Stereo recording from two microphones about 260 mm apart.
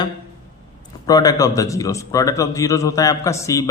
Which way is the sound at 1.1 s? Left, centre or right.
Centre.